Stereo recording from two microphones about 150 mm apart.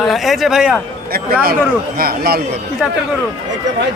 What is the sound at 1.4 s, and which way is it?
Speech, 80° right.